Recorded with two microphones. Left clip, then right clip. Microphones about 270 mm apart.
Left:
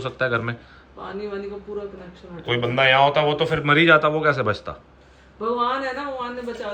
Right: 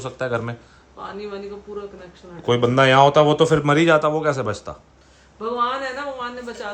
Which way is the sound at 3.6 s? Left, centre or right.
Centre.